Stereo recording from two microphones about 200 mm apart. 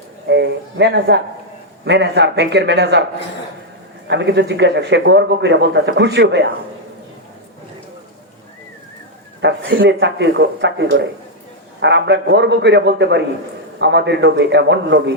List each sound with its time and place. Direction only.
0.3 s a man's voice: 60° right (ahead or behind)
4.1 s a man's voice: 60° right (ahead or behind)
9.4 s a man's voice: 60° right (ahead or behind)